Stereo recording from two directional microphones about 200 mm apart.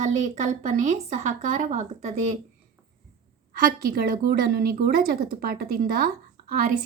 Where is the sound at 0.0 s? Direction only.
35° right (ahead or behind).